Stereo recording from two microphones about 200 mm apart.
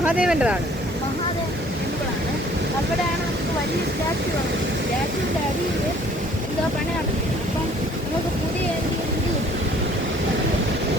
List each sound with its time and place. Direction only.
0.0 s speech: 5° right (ahead or behind)